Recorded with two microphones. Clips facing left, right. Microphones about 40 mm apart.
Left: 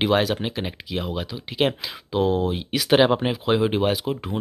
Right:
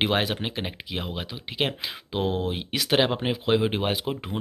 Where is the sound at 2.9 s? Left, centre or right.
Centre.